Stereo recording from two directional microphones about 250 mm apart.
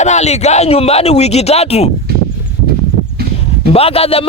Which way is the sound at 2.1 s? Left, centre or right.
Right.